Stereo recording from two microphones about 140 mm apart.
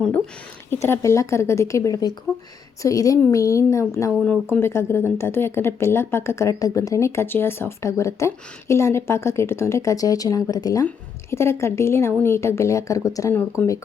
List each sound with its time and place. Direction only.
0.7 s speech: 20° left (ahead or behind)